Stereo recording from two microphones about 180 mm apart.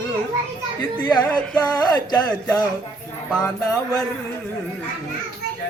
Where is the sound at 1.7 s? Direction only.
20° left (ahead or behind).